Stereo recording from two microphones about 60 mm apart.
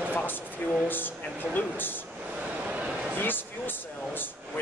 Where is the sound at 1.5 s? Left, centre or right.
Left.